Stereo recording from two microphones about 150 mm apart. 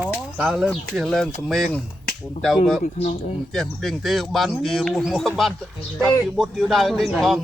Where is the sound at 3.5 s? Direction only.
Centre (ahead or behind).